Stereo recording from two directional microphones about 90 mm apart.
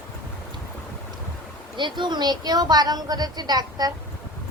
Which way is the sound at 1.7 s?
60° right (ahead or behind).